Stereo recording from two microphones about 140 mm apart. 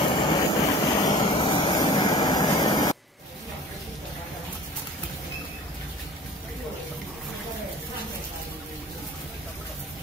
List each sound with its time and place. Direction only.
0.0 s vehicle: 35° left (ahead or behind)
1.2 s vehicle: 40° left (ahead or behind)